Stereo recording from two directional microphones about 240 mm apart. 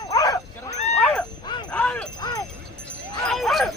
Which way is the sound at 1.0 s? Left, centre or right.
Centre.